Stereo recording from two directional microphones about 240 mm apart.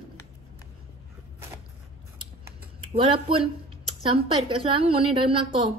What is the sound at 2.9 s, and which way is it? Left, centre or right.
Speech, right.